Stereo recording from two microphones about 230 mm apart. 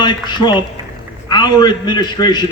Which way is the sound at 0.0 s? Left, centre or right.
Centre.